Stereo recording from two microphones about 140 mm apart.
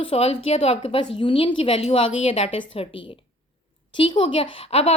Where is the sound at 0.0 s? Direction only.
45° left (ahead or behind).